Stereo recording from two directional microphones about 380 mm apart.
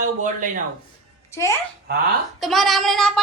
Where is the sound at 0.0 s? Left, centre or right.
Centre.